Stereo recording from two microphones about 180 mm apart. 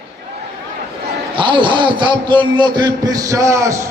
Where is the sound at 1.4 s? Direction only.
25° right (ahead or behind).